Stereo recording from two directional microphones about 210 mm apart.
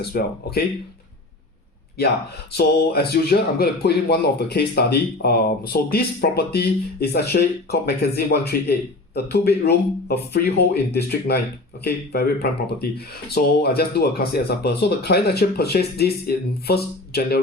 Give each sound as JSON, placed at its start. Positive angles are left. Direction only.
{"t": 0.0, "sound": "speech", "side_deg": 50}
{"t": 2.5, "sound": "speech", "side_deg": 50}